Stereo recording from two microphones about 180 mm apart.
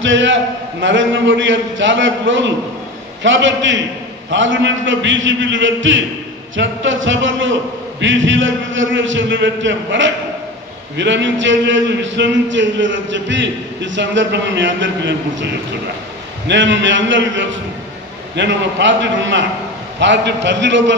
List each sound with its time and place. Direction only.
0.0 s a man's voice: 90° right
18.3 s a man's voice: 80° right